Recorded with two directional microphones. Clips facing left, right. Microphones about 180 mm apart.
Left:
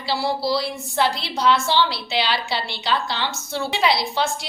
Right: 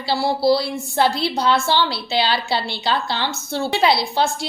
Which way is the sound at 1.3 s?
30° right (ahead or behind).